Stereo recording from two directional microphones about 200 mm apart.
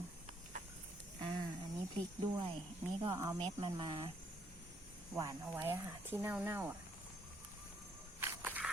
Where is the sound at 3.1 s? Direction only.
15° right (ahead or behind).